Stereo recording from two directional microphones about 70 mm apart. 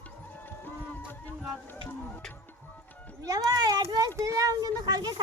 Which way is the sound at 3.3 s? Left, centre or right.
Right.